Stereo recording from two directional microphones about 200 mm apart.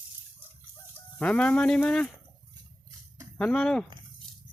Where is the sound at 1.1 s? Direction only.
5° left (ahead or behind).